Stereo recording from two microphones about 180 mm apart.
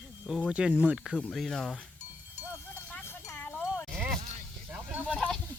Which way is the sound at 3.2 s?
10° left (ahead or behind).